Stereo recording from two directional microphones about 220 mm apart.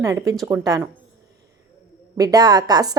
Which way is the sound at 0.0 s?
15° right (ahead or behind).